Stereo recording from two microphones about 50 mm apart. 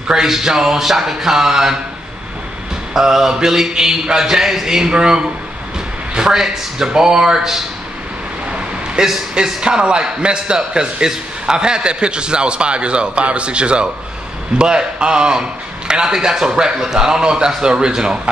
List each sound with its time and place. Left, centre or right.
0.1 s speech: centre
2.9 s speech: centre
8.5 s a sound: right
9.0 s a man's voice: centre